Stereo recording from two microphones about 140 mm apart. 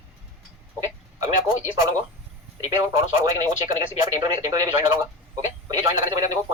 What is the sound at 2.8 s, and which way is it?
Speech, 25° right (ahead or behind).